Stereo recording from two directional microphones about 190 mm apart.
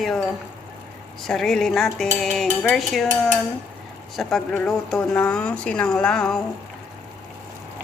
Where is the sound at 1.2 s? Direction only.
Centre (ahead or behind).